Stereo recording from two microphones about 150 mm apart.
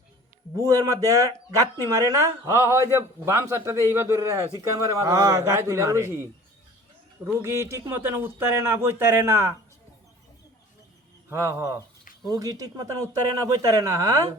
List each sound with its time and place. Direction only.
0.5 s speech: 20° right (ahead or behind)
7.4 s speech: 20° right (ahead or behind)
11.3 s speech: 15° right (ahead or behind)